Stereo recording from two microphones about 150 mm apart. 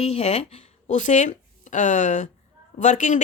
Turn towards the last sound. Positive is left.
turn(degrees=55)  # may be behind; listen again after turning